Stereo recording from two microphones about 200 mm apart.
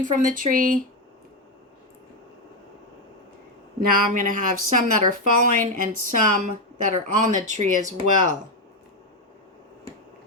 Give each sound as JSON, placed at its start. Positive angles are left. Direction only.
{"t": 0.0, "sound": "a woman's voice", "side_deg": -40}
{"t": 3.8, "sound": "a woman's voice", "side_deg": -45}